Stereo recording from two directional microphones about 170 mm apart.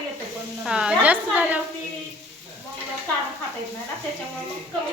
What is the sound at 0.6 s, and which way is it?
Speech, 5° right (ahead or behind).